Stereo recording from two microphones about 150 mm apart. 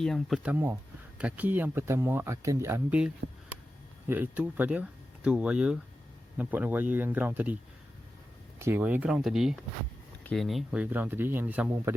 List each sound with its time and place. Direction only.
0.0 s speech: 5° left (ahead or behind)
0.4 s speech: 10° right (ahead or behind)
3.2 s speech: 90° right
4.1 s speech: 10° right (ahead or behind)
8.5 s speech: 15° right (ahead or behind)